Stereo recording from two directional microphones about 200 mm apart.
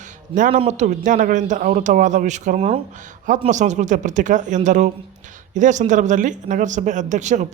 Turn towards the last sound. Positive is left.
turn(degrees=-35)  # may be behind; listen again after turning